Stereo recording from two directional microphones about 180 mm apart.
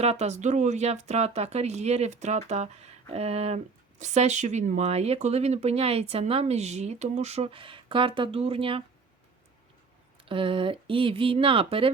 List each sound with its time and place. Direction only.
0.0 s speech: 35° right (ahead or behind)
10.2 s speech: 30° right (ahead or behind)